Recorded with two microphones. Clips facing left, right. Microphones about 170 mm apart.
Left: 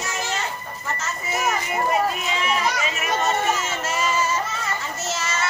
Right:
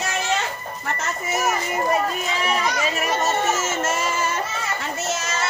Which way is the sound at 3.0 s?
45° right (ahead or behind).